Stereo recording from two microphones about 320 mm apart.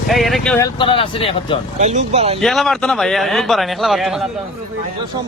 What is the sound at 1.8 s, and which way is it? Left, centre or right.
Speech, right.